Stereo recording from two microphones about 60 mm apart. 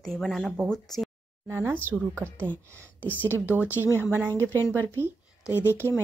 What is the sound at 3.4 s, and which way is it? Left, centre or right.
Speech, right.